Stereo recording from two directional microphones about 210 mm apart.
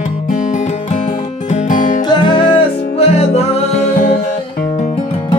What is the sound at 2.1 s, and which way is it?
Music, 20° left (ahead or behind).